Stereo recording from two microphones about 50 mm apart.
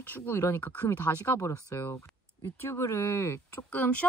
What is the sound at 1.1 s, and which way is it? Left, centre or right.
Speech, left.